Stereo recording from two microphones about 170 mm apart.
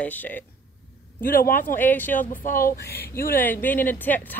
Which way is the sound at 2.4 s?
55° left (ahead or behind).